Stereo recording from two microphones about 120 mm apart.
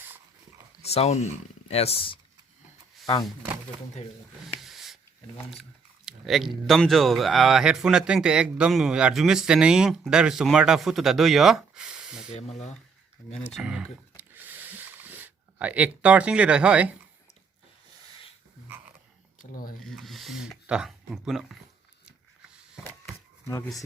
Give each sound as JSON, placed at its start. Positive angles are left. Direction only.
{"t": 0.9, "sound": "speech", "side_deg": 60}
{"t": 4.6, "sound": "snort", "side_deg": 0}
{"t": 6.1, "sound": "speech", "side_deg": 0}
{"t": 12.3, "sound": "speech", "side_deg": 65}
{"t": 13.5, "sound": "speech", "side_deg": -5}
{"t": 14.2, "sound": "a sound", "side_deg": -15}
{"t": 19.8, "sound": "speech", "side_deg": 0}